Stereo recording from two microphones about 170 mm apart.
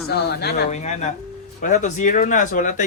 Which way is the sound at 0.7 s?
45° left (ahead or behind).